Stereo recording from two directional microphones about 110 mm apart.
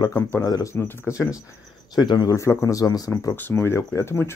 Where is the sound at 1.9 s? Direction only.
40° left (ahead or behind).